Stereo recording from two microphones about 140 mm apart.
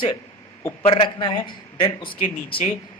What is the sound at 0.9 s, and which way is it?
Speech, 35° left (ahead or behind).